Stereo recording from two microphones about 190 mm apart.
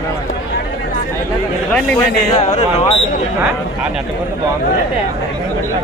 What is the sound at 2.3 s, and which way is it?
Speech, 35° left (ahead or behind).